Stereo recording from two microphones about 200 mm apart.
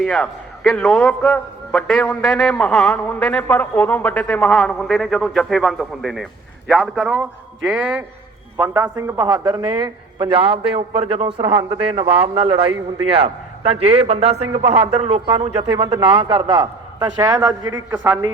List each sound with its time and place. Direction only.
0.0 s a man's voice: 5° left (ahead or behind)
8.5 s a man's voice: 15° right (ahead or behind)